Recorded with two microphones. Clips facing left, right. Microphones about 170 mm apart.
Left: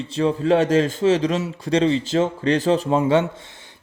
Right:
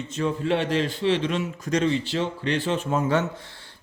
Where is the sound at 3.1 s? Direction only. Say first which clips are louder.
Left 5 dB; 25° left (ahead or behind).